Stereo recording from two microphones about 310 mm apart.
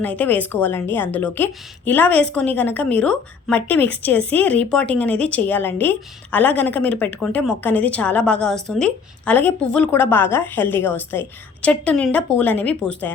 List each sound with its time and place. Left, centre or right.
0.0 s speech: centre